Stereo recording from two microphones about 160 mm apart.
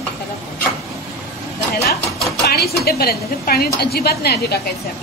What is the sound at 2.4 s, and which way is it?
A woman's voice, 80° left.